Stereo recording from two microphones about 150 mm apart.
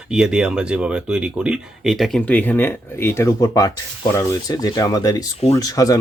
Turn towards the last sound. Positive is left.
turn(degrees=25)  # may be behind; listen again after turning